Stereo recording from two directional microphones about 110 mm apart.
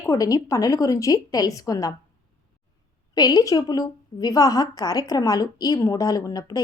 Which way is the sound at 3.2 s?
35° left (ahead or behind).